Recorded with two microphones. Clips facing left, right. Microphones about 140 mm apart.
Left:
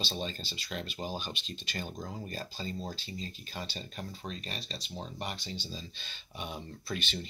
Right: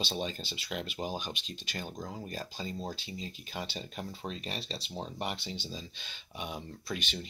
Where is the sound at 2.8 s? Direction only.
20° right (ahead or behind).